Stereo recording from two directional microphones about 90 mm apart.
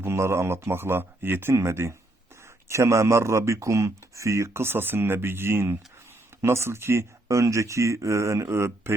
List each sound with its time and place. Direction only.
0.0 s speech: 30° right (ahead or behind)